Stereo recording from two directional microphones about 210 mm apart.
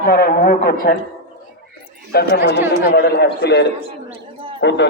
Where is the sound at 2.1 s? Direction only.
50° left (ahead or behind).